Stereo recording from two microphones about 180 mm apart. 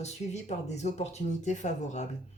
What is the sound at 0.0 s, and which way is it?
Speech, 40° left (ahead or behind).